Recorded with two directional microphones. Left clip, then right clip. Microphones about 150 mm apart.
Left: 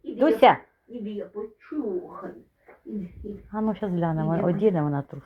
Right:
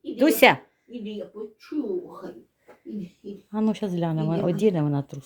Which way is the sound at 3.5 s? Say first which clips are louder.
Right 1 dB; 40° right (ahead or behind).